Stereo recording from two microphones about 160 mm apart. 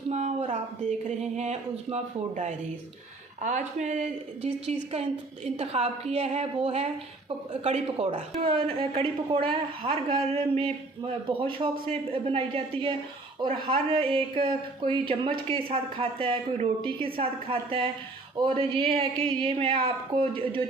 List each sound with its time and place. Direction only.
0.1 s speech: 45° right (ahead or behind)